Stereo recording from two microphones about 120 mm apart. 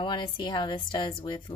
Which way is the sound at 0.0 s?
40° left (ahead or behind).